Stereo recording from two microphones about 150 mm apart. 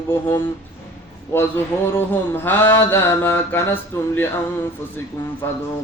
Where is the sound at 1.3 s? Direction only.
15° left (ahead or behind).